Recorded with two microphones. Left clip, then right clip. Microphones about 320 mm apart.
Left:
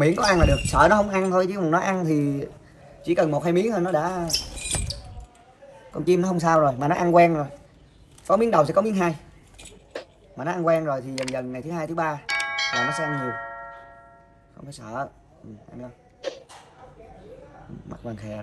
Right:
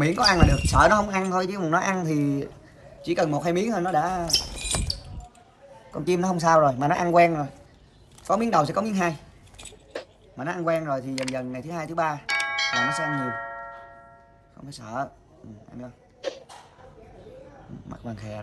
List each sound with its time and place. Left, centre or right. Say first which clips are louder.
0.0 s speech: left 1 dB; centre
4.6 s music: right 2 dB; centre
5.9 s speech: left 3 dB; centre
15.8 s a sound: even; centre
17.8 s speech: left 2 dB; centre